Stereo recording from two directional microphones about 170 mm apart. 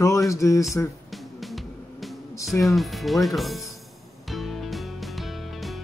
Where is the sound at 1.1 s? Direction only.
Centre (ahead or behind).